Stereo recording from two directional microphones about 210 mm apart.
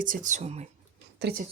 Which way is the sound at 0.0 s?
40° right (ahead or behind).